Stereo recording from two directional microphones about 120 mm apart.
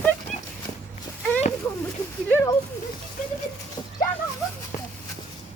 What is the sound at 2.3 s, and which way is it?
Speech, 25° left (ahead or behind).